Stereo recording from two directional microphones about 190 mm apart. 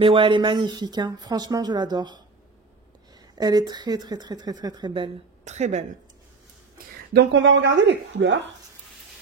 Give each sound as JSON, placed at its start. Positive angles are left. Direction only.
{"t": 0.0, "sound": "speech", "side_deg": -25}
{"t": 3.3, "sound": "speech", "side_deg": -20}
{"t": 5.4, "sound": "a woman's voice", "side_deg": -35}
{"t": 7.2, "sound": "speech", "side_deg": -70}